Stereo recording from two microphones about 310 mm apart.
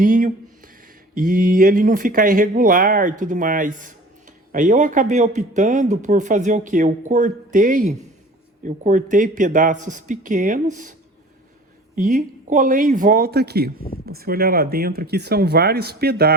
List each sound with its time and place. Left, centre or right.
0.0 s a sound: right
1.1 s speech: right
11.9 s speech: right